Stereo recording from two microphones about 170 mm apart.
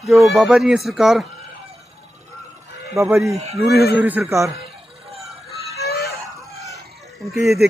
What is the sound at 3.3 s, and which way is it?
Speech, 40° right (ahead or behind).